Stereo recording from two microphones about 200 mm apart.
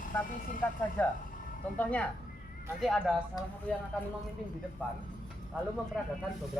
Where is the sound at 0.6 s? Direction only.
10° left (ahead or behind).